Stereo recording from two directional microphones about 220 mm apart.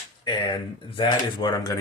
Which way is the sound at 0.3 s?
20° left (ahead or behind).